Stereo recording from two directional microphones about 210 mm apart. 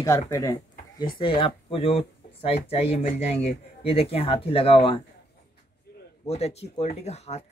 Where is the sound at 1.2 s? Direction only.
25° left (ahead or behind).